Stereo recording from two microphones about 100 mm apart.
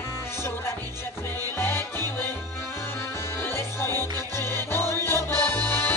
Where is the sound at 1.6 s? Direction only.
25° left (ahead or behind).